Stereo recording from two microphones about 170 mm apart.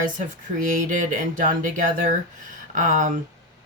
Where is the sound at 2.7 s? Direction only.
50° right (ahead or behind).